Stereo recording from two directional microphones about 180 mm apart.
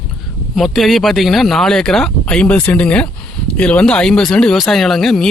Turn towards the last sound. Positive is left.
turn(degrees=0)  # may be behind; listen again after turning